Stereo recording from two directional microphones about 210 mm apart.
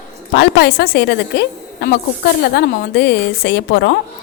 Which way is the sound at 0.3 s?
55° left (ahead or behind).